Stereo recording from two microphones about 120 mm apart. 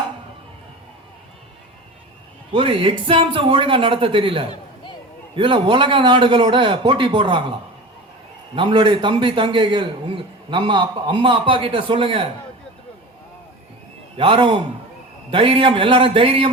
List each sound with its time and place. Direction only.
2.5 s a man's voice: 50° right (ahead or behind)
8.5 s a man's voice: 45° right (ahead or behind)
14.2 s a man's voice: 45° right (ahead or behind)